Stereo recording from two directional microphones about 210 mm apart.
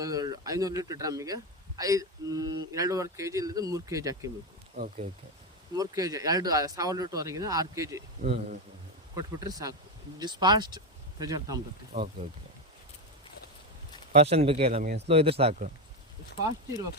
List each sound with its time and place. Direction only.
0.0 s speech: 15° right (ahead or behind)
5.7 s speech: 15° right (ahead or behind)
8.2 s speech: 35° right (ahead or behind)
9.1 s speech: 15° right (ahead or behind)
11.9 s speech: 30° right (ahead or behind)
14.1 s speech: 30° right (ahead or behind)